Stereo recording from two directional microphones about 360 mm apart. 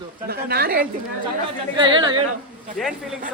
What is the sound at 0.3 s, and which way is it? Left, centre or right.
Speech, right.